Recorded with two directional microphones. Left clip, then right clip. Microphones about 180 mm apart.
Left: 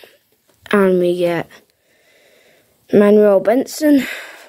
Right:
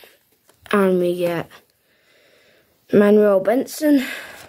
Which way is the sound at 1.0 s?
25° left (ahead or behind).